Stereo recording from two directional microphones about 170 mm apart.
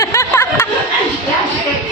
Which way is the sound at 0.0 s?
15° left (ahead or behind).